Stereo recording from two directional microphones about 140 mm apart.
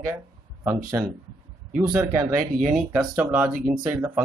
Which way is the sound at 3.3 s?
15° right (ahead or behind).